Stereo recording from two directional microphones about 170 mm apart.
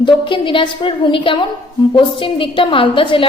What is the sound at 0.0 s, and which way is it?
A woman's voice, 30° left (ahead or behind).